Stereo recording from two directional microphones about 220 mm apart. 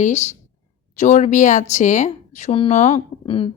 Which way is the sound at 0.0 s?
30° left (ahead or behind).